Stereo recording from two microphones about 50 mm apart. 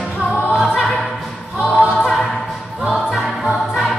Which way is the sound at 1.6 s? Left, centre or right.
Centre.